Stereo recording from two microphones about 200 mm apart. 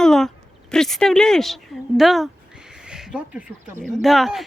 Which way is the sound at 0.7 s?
5° left (ahead or behind).